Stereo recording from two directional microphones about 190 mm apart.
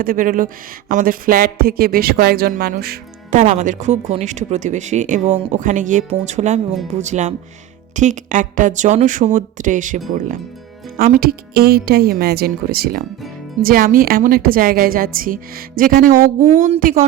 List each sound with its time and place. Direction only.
0.0 s a woman's voice: 45° right (ahead or behind)
3.3 s a woman's voice: 40° right (ahead or behind)